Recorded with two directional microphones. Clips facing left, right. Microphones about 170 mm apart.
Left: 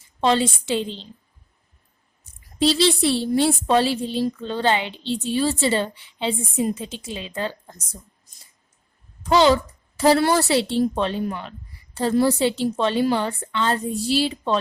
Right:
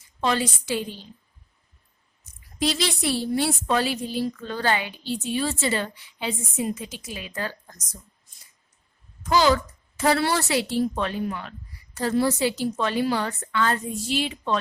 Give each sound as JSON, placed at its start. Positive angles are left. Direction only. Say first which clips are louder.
{"t": 0.2, "sound": "a woman's voice", "louder": "left 5 dB", "side_deg": 25}
{"t": 2.2, "sound": "a woman's voice", "louder": "left 6 dB", "side_deg": 30}
{"t": 8.3, "sound": "a sound", "louder": "left 3 dB", "side_deg": 40}
{"t": 9.2, "sound": "a woman's voice", "louder": "left 4 dB", "side_deg": 25}